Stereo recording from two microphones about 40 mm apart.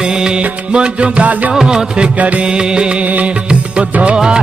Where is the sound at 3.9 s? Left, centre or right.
Right.